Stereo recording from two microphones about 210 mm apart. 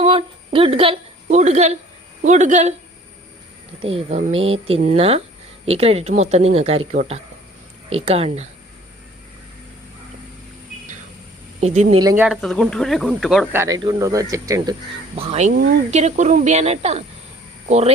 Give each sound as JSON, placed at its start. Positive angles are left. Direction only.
{"t": 0.0, "sound": "a woman's voice", "side_deg": -30}
{"t": 3.8, "sound": "speech", "side_deg": -25}
{"t": 11.6, "sound": "speech", "side_deg": -35}
{"t": 12.1, "sound": "speech", "side_deg": -5}
{"t": 13.5, "sound": "speech", "side_deg": -10}
{"t": 15.1, "sound": "speech", "side_deg": -30}